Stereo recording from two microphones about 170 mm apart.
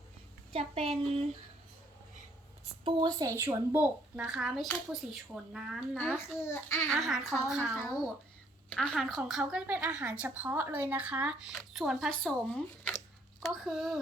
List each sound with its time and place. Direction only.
0.5 s a child's voice: 35° right (ahead or behind)
2.8 s a woman's voice: 25° right (ahead or behind); by 6.0 s 5° right (ahead or behind)
6.0 s a child's voice: 10° left (ahead or behind)
6.9 s a woman's voice: centre (ahead or behind)
8.7 s a woman's voice: 5° left (ahead or behind)